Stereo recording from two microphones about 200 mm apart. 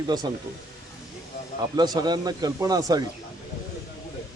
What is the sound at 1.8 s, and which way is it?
Speech, 20° right (ahead or behind).